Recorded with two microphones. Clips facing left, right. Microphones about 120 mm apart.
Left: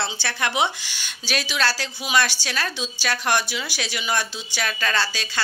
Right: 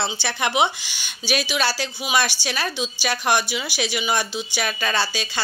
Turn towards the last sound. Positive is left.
turn(degrees=-15)  # may be behind; listen again after turning